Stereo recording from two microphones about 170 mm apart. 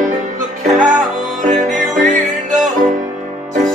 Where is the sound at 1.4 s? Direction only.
45° right (ahead or behind).